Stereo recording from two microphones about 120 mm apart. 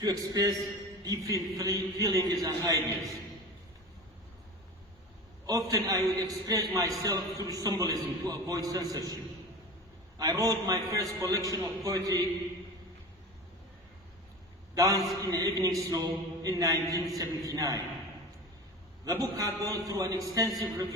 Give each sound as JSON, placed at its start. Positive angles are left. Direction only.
{"t": 0.0, "sound": "a man's voice", "side_deg": -30}
{"t": 5.5, "sound": "a man's voice", "side_deg": -30}
{"t": 10.2, "sound": "a man's voice", "side_deg": -30}
{"t": 14.8, "sound": "a man's voice", "side_deg": -30}
{"t": 19.0, "sound": "a man's voice", "side_deg": -30}